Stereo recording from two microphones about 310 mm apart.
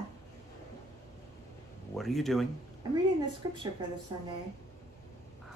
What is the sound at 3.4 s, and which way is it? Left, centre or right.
Speech, centre.